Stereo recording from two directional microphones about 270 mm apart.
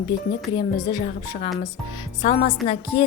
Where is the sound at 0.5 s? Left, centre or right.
Centre.